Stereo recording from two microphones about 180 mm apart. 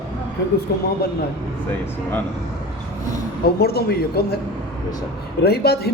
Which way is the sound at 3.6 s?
60° left (ahead or behind).